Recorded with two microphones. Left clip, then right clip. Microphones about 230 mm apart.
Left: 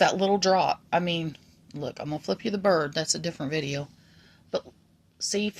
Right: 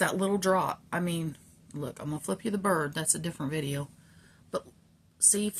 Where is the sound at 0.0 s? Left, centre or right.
Centre.